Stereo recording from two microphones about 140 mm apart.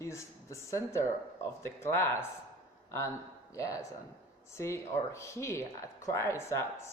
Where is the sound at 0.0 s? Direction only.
20° left (ahead or behind).